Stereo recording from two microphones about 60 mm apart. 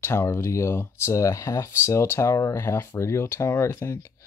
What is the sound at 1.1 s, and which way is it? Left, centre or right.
Speech, left.